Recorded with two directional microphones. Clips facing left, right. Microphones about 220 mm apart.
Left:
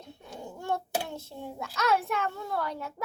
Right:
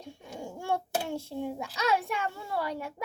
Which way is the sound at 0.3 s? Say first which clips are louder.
Right 1 dB; 10° right (ahead or behind).